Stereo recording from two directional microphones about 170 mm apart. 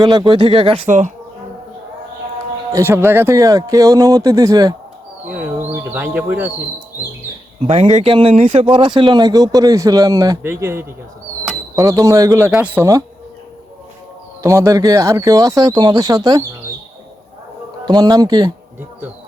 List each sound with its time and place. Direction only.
0.0 s speech: 25° right (ahead or behind)
0.9 s speech: 45° right (ahead or behind)
2.7 s speech: 15° right (ahead or behind)
5.9 s speech: 10° right (ahead or behind)
7.7 s speech: 40° right (ahead or behind); by 12.5 s 20° right (ahead or behind)
12.5 s speech: 10° right (ahead or behind)
14.4 s speech: 20° right (ahead or behind)
17.8 s speech: 25° right (ahead or behind)